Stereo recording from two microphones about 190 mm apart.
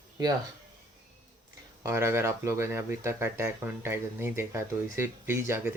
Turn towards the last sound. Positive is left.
turn(degrees=-15)  # may be behind; listen again after turning